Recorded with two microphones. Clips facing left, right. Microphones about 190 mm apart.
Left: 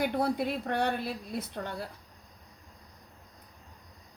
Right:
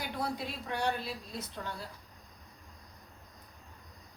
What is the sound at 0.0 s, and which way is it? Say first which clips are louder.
A woman's voice: left 8 dB; 55° left (ahead or behind).